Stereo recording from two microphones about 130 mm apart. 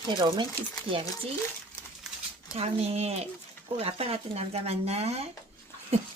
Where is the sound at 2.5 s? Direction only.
50° right (ahead or behind).